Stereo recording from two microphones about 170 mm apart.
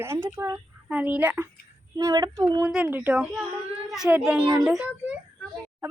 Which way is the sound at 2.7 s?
10° right (ahead or behind).